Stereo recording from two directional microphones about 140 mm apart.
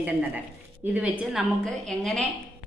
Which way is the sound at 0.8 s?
15° right (ahead or behind).